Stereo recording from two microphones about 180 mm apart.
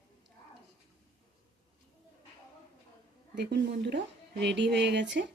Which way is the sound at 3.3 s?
65° right (ahead or behind).